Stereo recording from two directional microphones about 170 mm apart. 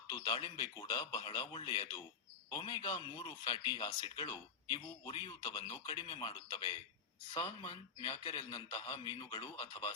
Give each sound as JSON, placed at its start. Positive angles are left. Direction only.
{"t": 0.1, "sound": "a man's voice", "side_deg": 25}